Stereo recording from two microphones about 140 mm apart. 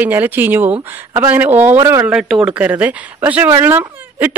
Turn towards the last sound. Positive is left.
turn(degrees=-15)  # may be behind; listen again after turning